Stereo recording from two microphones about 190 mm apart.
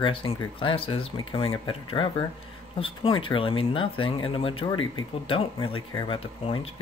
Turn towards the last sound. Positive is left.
turn(degrees=30)  # may be behind; listen again after turning